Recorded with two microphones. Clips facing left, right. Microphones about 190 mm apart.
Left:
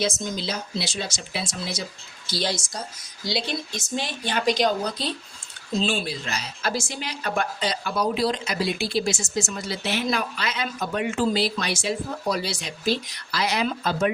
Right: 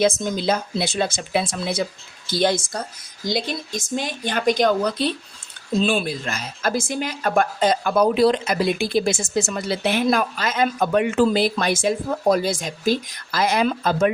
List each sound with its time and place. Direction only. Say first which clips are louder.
0.0 s speech: right 7 dB; 55° right (ahead or behind)
9.2 s speech: right 5 dB; 65° right (ahead or behind)